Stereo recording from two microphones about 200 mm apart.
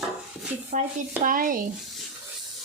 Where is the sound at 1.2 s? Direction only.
45° right (ahead or behind).